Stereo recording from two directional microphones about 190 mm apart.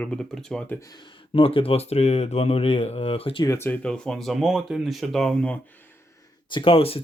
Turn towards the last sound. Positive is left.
turn(degrees=30)  # may be behind; listen again after turning